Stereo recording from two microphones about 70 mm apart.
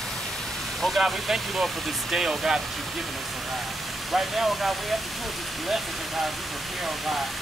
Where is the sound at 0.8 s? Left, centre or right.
Centre.